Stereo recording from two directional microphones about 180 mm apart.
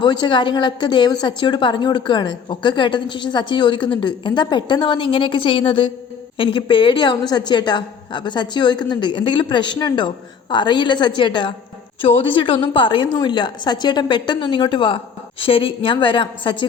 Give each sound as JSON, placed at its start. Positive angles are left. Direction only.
{"t": 0.0, "sound": "a woman's voice", "side_deg": 25}